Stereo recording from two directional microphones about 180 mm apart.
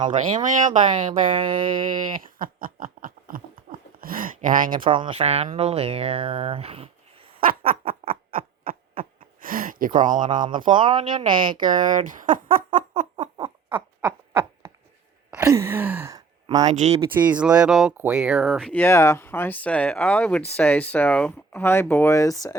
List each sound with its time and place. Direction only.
0.4 s speech: 45° right (ahead or behind)
0.9 s speech: 30° right (ahead or behind)
2.2 s a sound: 50° right (ahead or behind)
4.8 s speech: 30° right (ahead or behind)
7.4 s a sound: 50° right (ahead or behind)
10.8 s speech: 25° right (ahead or behind)
11.9 s speech: 45° right (ahead or behind)
13.3 s owl: 25° right (ahead or behind)
15.3 s sigh: 15° right (ahead or behind)
16.6 s speech: 40° right (ahead or behind)
17.2 s speech: 5° right (ahead or behind); by 22.5 s 15° left (ahead or behind)